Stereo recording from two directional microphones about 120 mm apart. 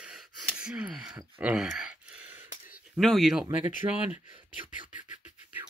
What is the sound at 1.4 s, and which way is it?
Sigh, 5° right (ahead or behind).